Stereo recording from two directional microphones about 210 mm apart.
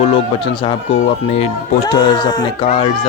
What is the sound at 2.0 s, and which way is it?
Speech, 20° left (ahead or behind).